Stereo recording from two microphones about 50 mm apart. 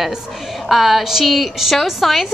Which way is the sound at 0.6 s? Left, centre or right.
Centre.